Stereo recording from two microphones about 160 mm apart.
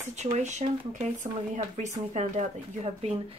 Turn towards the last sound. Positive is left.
turn(degrees=-45)  # may be behind; listen again after turning